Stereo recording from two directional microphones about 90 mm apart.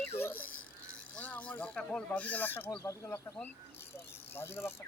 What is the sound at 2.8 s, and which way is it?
Speech, 35° left (ahead or behind).